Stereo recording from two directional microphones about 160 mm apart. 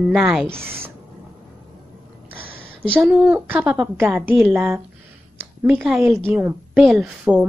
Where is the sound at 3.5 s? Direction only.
10° right (ahead or behind).